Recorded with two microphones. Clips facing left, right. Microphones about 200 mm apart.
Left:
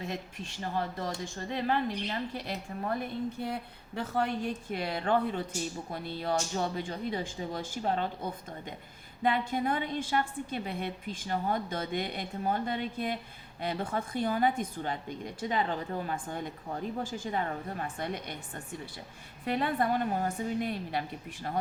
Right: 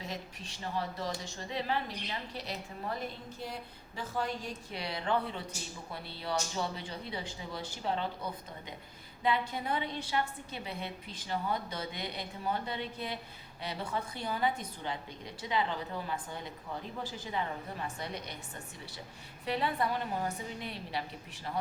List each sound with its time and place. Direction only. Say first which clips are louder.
0.0 s a woman's voice: left 4 dB; 55° left (ahead or behind)
19.5 s a woman's voice: left 3 dB; 50° left (ahead or behind)